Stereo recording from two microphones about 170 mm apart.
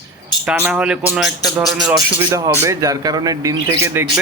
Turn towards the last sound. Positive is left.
turn(degrees=-15)  # may be behind; listen again after turning